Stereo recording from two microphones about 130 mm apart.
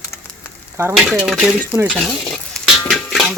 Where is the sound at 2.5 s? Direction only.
Centre (ahead or behind).